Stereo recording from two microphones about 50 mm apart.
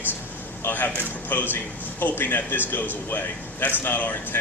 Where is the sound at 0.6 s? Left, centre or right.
Left.